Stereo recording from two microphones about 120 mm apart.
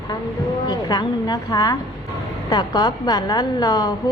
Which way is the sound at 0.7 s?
30° left (ahead or behind).